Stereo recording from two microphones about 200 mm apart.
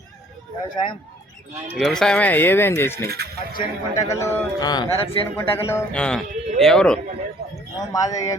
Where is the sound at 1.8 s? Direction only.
Centre (ahead or behind).